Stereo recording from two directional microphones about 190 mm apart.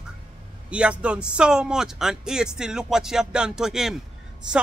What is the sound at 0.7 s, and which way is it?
A woman's voice, 5° right (ahead or behind).